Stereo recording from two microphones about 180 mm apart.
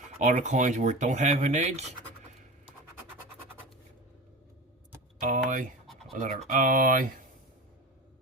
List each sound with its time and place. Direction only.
0.2 s speech: 45° right (ahead or behind)
5.2 s speech: 45° right (ahead or behind)